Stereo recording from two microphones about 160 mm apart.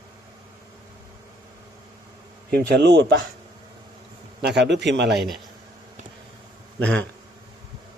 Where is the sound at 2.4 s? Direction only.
80° right.